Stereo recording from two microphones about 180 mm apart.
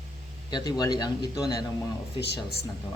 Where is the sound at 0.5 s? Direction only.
20° left (ahead or behind).